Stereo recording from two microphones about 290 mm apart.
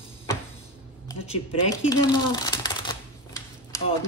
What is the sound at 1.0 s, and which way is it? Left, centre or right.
Speech, centre.